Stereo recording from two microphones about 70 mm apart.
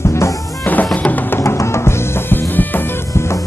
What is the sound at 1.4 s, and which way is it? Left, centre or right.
Music, left.